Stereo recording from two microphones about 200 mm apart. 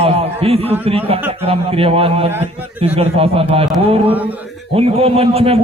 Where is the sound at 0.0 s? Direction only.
30° right (ahead or behind).